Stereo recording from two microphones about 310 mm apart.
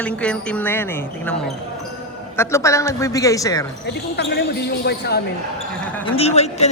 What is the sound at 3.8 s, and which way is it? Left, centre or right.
Speech, left.